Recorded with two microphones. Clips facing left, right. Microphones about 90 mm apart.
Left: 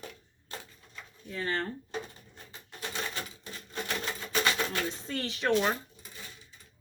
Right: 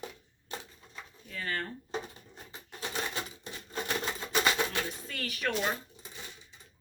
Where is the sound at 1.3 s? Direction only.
25° left (ahead or behind).